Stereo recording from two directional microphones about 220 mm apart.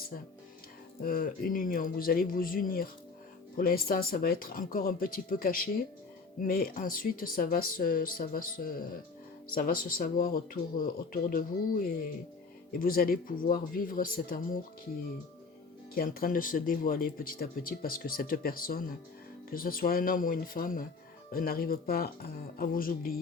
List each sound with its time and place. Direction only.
1.0 s speech: 40° left (ahead or behind)
16.0 s speech: 40° left (ahead or behind)